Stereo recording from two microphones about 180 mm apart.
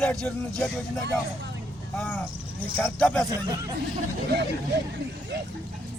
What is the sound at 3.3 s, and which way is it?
Speech, 20° right (ahead or behind).